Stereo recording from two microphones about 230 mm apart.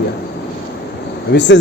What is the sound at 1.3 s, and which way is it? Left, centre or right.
Speech, left.